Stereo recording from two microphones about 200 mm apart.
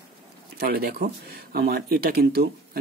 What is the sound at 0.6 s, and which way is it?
Speech, 50° right (ahead or behind).